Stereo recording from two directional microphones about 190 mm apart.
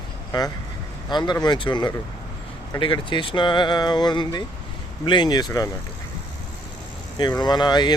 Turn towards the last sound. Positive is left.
turn(degrees=20)  # may be behind; listen again after turning